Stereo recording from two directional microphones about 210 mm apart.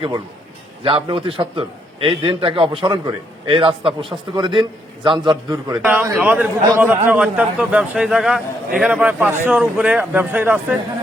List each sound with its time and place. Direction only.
0.9 s a man's voice: 25° right (ahead or behind)
5.7 s a man's voice: 10° right (ahead or behind)